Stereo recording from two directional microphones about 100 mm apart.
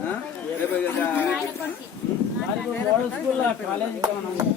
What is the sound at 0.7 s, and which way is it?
Speech, 15° left (ahead or behind).